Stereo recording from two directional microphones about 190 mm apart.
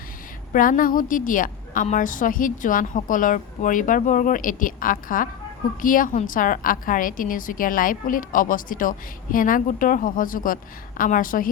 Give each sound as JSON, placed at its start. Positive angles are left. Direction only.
{"t": 0.5, "sound": "a woman's voice", "side_deg": 45}